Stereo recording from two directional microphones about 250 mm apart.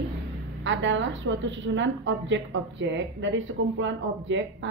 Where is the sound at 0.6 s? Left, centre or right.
Right.